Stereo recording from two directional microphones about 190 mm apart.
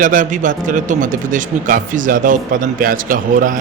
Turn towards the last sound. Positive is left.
turn(degrees=-45)  # may be behind; listen again after turning